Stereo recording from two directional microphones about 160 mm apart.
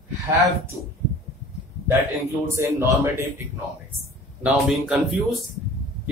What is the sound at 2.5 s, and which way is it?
Speech, 15° right (ahead or behind).